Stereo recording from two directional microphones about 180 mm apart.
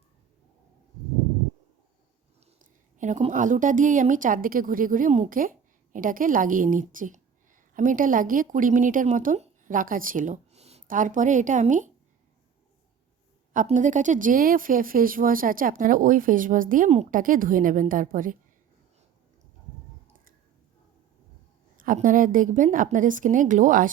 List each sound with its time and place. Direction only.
3.0 s speech: 40° right (ahead or behind)
13.7 s speech: 45° right (ahead or behind)
21.8 s speech: 50° right (ahead or behind)